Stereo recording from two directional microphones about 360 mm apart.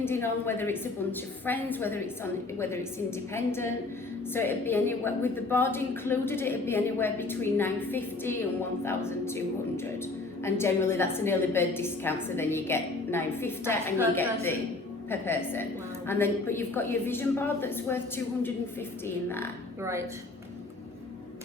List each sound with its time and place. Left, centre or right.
0.0 s a woman's voice: centre
19.0 s a woman's voice: centre